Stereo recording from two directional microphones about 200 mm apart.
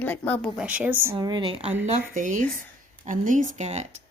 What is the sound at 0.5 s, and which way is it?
Speech, 5° right (ahead or behind).